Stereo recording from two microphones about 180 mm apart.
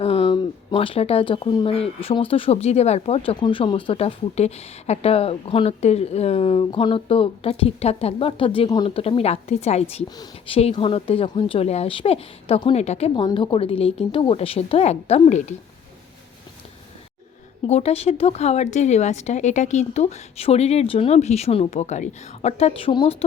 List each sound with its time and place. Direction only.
0.0 s a woman's voice: 30° left (ahead or behind)
17.7 s a woman's voice: 35° left (ahead or behind)